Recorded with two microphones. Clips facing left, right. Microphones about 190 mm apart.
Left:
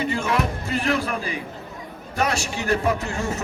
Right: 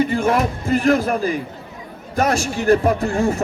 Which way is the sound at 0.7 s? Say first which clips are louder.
Right 10 dB; 45° right (ahead or behind).